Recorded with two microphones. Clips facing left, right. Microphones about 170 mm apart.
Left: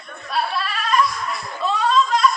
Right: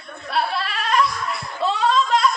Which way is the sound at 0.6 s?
70° right (ahead or behind).